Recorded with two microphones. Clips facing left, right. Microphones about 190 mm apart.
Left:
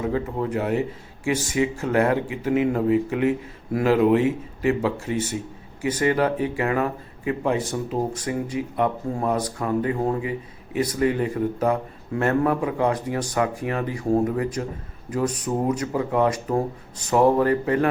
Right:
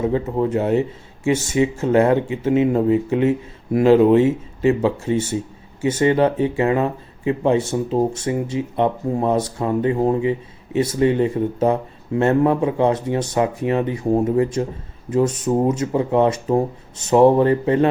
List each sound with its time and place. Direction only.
0.0 s speech: 25° right (ahead or behind)